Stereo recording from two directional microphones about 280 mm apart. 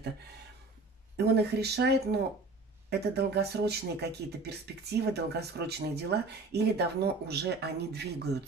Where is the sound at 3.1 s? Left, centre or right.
Right.